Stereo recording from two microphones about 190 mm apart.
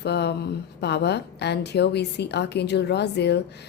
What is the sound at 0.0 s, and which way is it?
Speech, 60° left (ahead or behind).